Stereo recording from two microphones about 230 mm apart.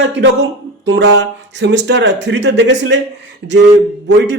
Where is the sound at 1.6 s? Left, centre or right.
Right.